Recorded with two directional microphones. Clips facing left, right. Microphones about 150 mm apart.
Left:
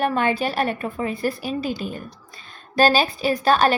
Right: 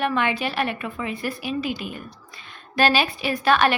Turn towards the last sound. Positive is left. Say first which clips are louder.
# left 2 dB
turn(degrees=35)  # may be behind; listen again after turning